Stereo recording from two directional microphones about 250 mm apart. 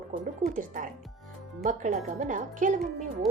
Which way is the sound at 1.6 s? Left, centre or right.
Right.